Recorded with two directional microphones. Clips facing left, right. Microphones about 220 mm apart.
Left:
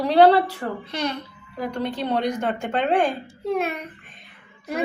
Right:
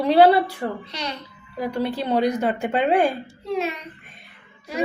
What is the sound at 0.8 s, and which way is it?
Speech, 55° left (ahead or behind).